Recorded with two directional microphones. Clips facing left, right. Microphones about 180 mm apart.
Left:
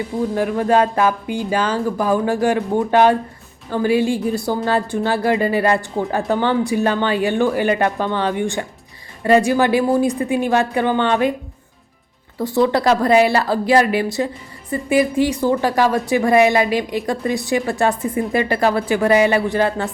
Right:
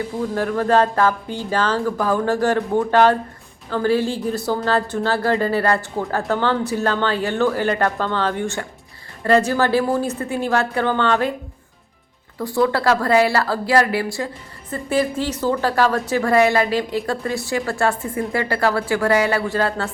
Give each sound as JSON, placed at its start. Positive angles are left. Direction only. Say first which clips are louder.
{"t": 0.2, "sound": "speech", "louder": "left 3 dB", "side_deg": 15}
{"t": 12.4, "sound": "speech", "louder": "left 3 dB", "side_deg": 20}